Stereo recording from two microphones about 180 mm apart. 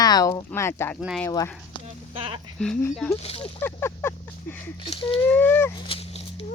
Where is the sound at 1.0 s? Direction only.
5° right (ahead or behind).